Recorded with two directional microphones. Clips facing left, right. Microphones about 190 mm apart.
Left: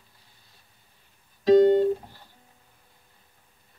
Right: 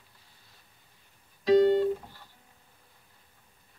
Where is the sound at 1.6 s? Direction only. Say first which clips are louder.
Left 4 dB; 50° left (ahead or behind).